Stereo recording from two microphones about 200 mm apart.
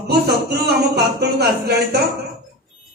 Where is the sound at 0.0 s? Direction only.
55° right (ahead or behind).